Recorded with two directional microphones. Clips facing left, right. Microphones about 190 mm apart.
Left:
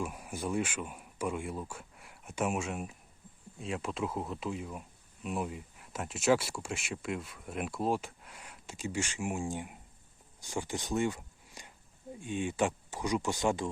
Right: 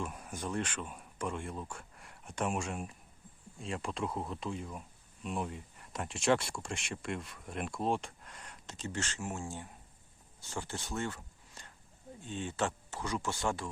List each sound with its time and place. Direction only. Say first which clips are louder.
0.0 s speech: left 3 dB; 5° left (ahead or behind)